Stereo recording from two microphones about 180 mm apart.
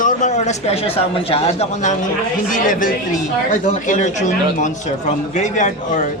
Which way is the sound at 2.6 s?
50° left (ahead or behind).